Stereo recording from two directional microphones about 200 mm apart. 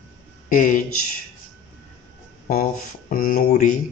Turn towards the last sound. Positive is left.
turn(degrees=40)  # may be behind; listen again after turning